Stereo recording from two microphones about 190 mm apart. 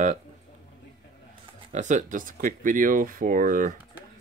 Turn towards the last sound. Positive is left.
turn(degrees=-45)  # may be behind; listen again after turning